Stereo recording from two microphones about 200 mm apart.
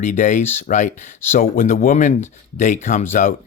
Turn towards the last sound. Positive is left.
turn(degrees=40)  # may be behind; listen again after turning